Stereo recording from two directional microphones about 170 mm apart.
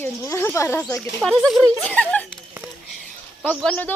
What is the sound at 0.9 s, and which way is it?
Speech, centre (ahead or behind).